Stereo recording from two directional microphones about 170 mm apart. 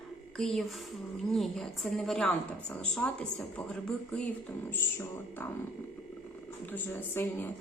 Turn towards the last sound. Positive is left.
turn(degrees=10)  # may be behind; listen again after turning